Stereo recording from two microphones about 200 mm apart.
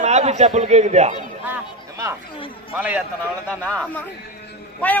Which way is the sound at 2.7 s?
5° right (ahead or behind).